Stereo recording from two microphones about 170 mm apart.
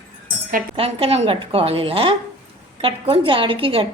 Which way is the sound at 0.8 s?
35° right (ahead or behind).